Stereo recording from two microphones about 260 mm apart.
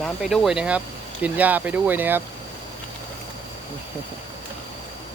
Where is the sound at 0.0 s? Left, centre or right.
Centre.